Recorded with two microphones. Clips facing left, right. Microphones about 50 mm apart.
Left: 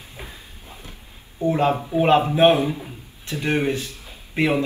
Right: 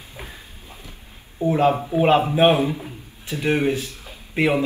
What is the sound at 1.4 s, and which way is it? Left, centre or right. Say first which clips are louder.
A man's voice: right 2 dB; centre.